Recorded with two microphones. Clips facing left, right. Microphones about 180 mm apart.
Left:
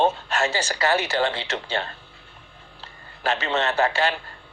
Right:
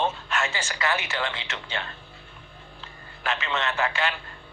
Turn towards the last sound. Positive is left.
turn(degrees=35)  # may be behind; listen again after turning